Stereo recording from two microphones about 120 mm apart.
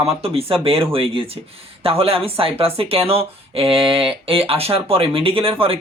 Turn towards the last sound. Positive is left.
turn(degrees=-50)  # may be behind; listen again after turning